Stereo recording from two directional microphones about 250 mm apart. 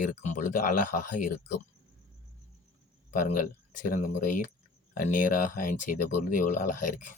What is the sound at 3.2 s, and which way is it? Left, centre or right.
Speech, left.